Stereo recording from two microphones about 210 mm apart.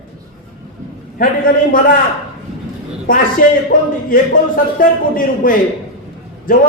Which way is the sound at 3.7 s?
40° left (ahead or behind).